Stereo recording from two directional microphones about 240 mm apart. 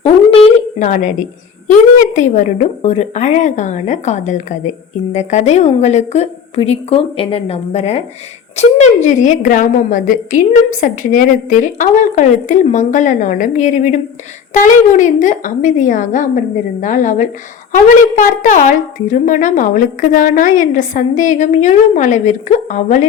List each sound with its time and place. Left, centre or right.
0.0 s dog: left
2.1 s a woman's voice: left